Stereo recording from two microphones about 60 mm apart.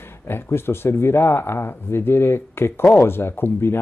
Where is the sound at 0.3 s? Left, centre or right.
Left.